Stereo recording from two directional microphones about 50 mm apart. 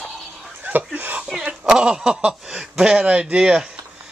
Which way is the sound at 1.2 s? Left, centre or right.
Centre.